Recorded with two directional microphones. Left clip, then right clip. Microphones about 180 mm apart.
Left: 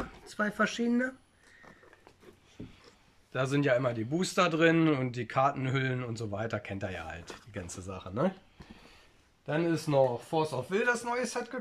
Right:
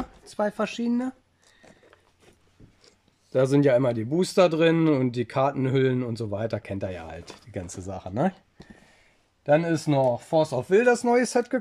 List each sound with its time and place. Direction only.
0.3 s speech: 25° right (ahead or behind)
3.3 s speech: 30° right (ahead or behind)
9.5 s speech: 40° right (ahead or behind)